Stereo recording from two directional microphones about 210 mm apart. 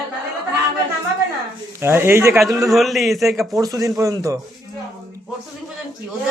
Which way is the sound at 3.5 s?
15° right (ahead or behind).